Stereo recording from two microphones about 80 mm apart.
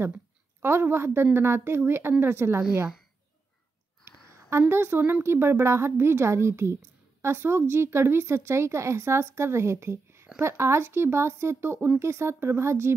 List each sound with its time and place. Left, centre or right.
0.0 s speech: right
4.0 s speech: right